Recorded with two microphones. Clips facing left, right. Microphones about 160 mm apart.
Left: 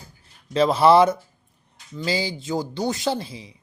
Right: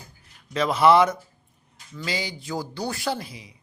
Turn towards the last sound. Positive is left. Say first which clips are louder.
# left 3 dB
turn(degrees=25)  # may be behind; listen again after turning